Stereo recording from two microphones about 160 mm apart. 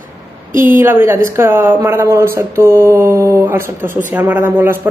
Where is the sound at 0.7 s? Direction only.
15° right (ahead or behind).